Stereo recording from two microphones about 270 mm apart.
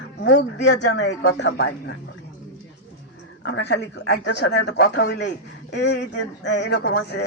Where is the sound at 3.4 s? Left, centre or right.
Left.